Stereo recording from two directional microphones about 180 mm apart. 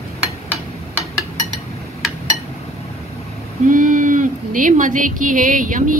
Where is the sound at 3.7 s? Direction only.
45° right (ahead or behind).